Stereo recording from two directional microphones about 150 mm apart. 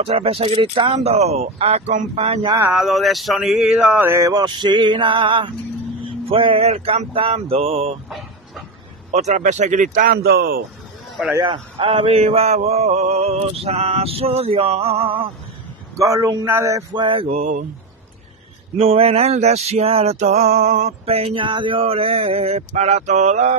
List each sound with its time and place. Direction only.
0.0 s male singing: 40° right (ahead or behind)
2.4 s speech: 20° right (ahead or behind)
2.7 s speech: centre (ahead or behind); by 5.5 s 35° right (ahead or behind)
6.0 s mantra: 35° right (ahead or behind)
9.1 s speech: 50° right (ahead or behind); by 10.6 s 90° right
11.3 s mantra: 35° right (ahead or behind)
16.0 s speech: 20° right (ahead or behind); by 17.6 s 50° right (ahead or behind)
18.8 s male singing: 40° right (ahead or behind)